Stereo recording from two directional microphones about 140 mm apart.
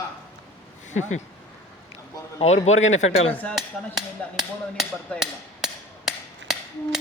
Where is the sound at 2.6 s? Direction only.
55° left (ahead or behind).